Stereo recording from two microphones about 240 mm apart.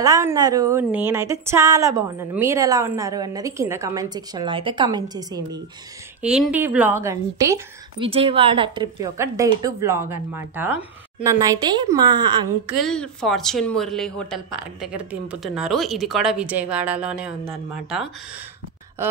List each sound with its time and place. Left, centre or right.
0.0 s a woman's voice: centre
6.2 s a woman's voice: centre
8.1 s a woman's voice: right
12.6 s speech: centre